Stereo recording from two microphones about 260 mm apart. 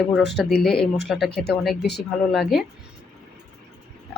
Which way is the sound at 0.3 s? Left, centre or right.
Centre.